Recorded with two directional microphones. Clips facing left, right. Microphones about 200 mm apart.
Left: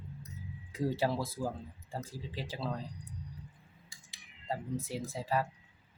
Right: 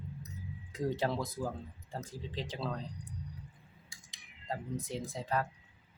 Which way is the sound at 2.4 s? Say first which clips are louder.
Even; 5° left (ahead or behind).